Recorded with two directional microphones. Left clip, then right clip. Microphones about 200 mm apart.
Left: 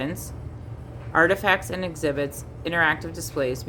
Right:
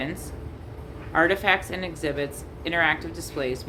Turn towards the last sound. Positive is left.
turn(degrees=35)  # may be behind; listen again after turning